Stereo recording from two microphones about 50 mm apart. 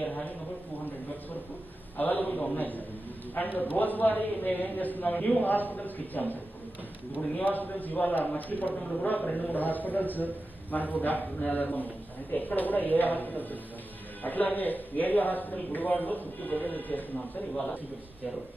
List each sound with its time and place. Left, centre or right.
0.0 s a sound: left
2.0 s a man's voice: left
7.3 s a man's voice: left